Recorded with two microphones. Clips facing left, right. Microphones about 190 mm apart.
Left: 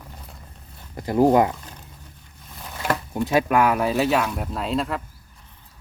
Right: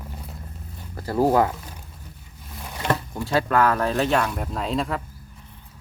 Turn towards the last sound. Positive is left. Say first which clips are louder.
# even
turn(degrees=0)  # may be behind; listen again after turning